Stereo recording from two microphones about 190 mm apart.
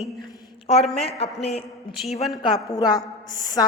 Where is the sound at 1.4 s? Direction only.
35° left (ahead or behind).